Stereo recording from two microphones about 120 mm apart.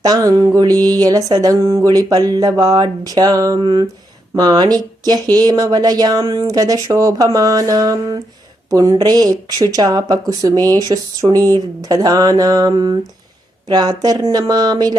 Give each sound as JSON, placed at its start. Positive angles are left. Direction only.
{"t": 0.0, "sound": "speech", "side_deg": -30}